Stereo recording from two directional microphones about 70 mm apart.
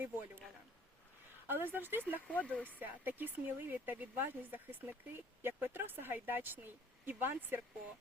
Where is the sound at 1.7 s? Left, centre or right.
Right.